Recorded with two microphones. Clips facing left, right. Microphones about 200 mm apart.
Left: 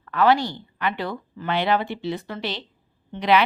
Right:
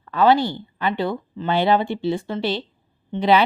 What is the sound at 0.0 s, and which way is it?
A woman's voice, 25° right (ahead or behind).